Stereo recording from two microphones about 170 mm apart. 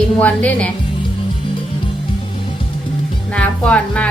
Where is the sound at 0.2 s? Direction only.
10° left (ahead or behind).